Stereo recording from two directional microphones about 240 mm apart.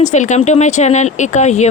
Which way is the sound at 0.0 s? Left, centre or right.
Left.